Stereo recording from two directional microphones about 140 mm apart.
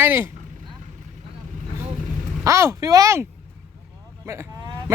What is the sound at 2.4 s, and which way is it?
Speech, 20° right (ahead or behind).